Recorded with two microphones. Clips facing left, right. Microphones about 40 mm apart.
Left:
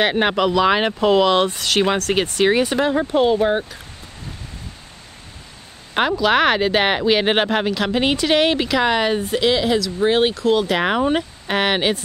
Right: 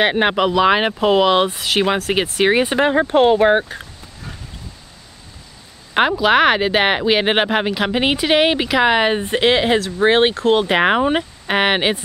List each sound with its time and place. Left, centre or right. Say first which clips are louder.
0.0 s speech: right 2 dB; centre; by 3.8 s right
5.9 s speech: right 3 dB; centre